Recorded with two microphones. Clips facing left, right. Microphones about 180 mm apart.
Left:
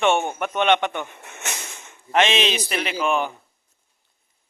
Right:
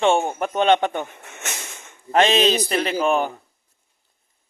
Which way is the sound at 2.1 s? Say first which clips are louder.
Right 3 dB; 40° right (ahead or behind).